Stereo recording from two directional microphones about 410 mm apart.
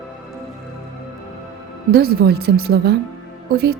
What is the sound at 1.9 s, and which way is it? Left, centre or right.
Speech, right.